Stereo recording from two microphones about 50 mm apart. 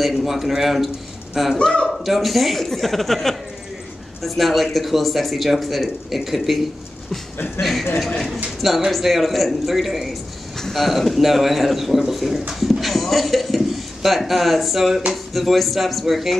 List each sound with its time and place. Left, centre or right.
0.0 s speech: centre
1.6 s speech: centre
2.0 s speech: centre
7.6 s speech: left
8.5 s speech: centre
12.5 s horse: centre
14.0 s speech: centre